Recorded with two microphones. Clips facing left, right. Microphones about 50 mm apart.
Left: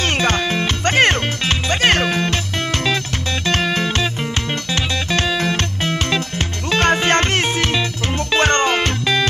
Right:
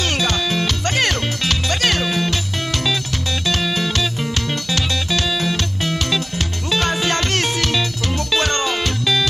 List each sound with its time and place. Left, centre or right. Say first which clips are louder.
0.0 s music: left 3 dB; left
2.0 s music: left 2 dB; left
7.2 s music: left 2 dB; left